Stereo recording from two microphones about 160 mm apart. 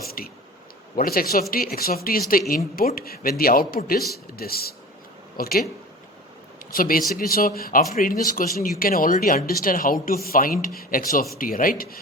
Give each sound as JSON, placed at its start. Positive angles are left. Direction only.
{"t": 0.2, "sound": "a sound", "side_deg": 65}
{"t": 0.9, "sound": "a man's voice", "side_deg": 65}
{"t": 6.7, "sound": "speech", "side_deg": 65}